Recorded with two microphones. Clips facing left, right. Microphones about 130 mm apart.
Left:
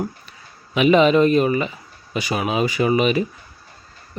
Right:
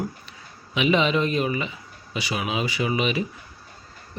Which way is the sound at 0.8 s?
50° left (ahead or behind).